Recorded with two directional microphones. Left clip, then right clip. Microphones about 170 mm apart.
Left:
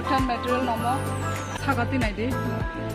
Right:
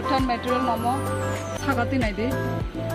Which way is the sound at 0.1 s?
10° right (ahead or behind).